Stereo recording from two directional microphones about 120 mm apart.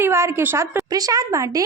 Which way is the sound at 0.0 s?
20° right (ahead or behind).